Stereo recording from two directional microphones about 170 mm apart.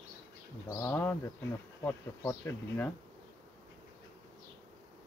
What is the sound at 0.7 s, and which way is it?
Speech, 15° left (ahead or behind).